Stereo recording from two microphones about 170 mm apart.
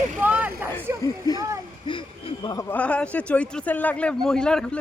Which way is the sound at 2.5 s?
20° left (ahead or behind).